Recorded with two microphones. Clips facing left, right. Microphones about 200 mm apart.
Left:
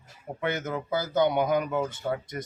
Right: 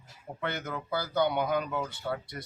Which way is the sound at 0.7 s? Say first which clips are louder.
Left 4 dB; 20° left (ahead or behind).